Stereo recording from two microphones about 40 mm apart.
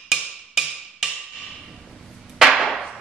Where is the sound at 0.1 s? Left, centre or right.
Centre.